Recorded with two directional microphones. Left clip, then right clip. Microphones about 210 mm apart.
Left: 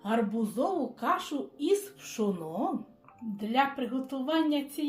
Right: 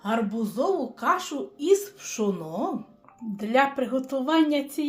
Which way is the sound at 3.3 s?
30° right (ahead or behind).